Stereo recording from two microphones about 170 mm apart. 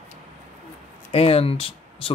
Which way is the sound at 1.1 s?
35° left (ahead or behind).